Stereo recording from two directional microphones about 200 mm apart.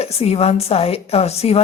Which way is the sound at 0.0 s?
30° left (ahead or behind).